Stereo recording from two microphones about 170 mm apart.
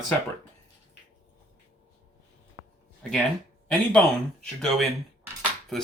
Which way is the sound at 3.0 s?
5° left (ahead or behind).